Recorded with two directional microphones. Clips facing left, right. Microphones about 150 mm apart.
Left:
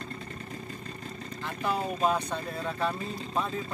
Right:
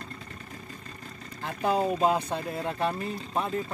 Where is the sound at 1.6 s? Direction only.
20° right (ahead or behind).